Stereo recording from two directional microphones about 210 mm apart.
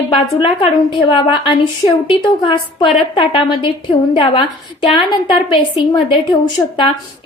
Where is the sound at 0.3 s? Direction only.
25° left (ahead or behind).